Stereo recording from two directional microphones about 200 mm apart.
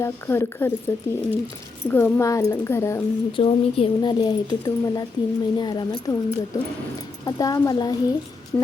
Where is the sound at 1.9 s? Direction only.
10° left (ahead or behind).